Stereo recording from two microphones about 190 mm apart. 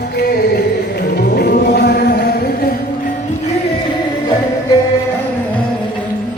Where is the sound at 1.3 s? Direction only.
60° left (ahead or behind).